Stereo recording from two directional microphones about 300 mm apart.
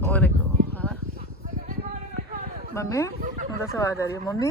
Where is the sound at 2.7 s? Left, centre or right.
Centre.